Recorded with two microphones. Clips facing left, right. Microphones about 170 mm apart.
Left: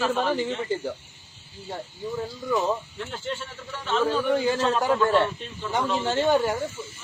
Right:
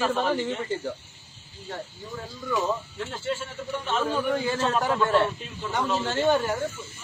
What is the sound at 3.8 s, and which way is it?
Speech, 10° right (ahead or behind).